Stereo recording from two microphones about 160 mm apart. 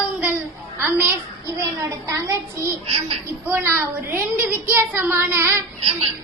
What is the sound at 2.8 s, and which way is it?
Baby laughter, 40° right (ahead or behind).